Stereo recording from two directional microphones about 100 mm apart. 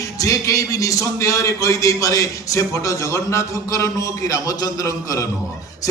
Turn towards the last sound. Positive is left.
turn(degrees=35)  # may be behind; listen again after turning